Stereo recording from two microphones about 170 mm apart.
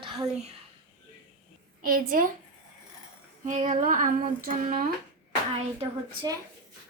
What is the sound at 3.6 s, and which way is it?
Speech, 55° right (ahead or behind).